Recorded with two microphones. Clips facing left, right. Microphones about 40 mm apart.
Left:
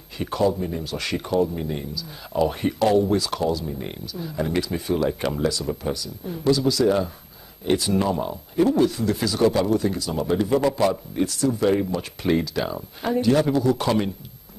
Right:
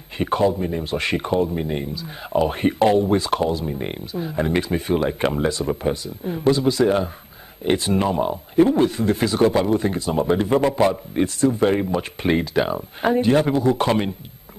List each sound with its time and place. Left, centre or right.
0.2 s speech: right